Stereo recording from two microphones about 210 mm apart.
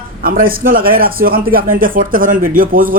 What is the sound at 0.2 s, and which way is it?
A man's voice, 45° right (ahead or behind).